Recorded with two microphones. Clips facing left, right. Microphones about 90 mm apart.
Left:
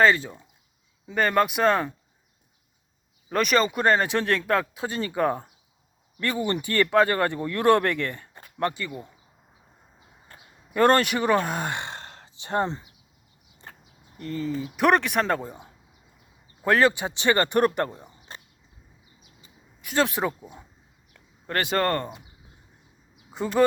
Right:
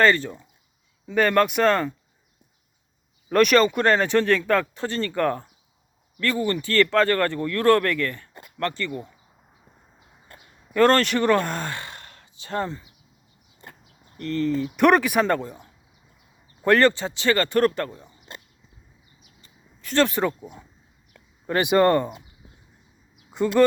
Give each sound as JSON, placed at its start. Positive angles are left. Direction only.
{"t": 0.0, "sound": "speech", "side_deg": 5}
{"t": 3.2, "sound": "speech", "side_deg": 0}
{"t": 10.8, "sound": "speech", "side_deg": 15}
{"t": 11.7, "sound": "sigh", "side_deg": 25}
{"t": 13.8, "sound": "speech", "side_deg": 10}
{"t": 15.4, "sound": "speech", "side_deg": 20}
{"t": 16.6, "sound": "speech", "side_deg": 5}
{"t": 16.9, "sound": "speech", "side_deg": 15}
{"t": 19.4, "sound": "a sound", "side_deg": 10}
{"t": 21.5, "sound": "speech", "side_deg": -15}
{"t": 23.3, "sound": "speech", "side_deg": 0}